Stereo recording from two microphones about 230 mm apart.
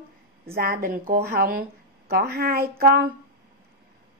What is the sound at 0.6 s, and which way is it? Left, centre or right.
Speech, right.